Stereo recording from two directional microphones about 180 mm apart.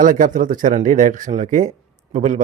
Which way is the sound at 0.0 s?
45° right (ahead or behind).